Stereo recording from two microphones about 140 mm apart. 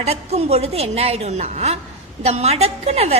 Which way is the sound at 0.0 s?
50° right (ahead or behind).